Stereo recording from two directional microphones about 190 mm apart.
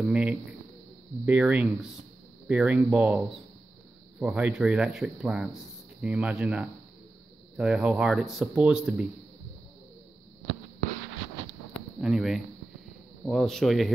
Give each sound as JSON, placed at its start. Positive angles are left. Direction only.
{"t": 0.0, "sound": "speech", "side_deg": -5}
{"t": 12.0, "sound": "speech", "side_deg": 0}